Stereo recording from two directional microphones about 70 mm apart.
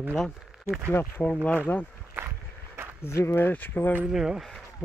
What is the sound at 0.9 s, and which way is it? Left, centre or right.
Speech, left.